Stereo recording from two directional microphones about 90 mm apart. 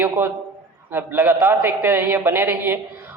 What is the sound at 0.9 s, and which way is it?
Speech, 25° right (ahead or behind).